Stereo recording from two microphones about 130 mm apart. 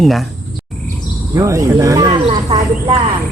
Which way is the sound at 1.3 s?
25° right (ahead or behind).